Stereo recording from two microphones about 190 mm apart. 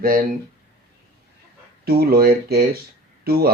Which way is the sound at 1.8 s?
55° right (ahead or behind).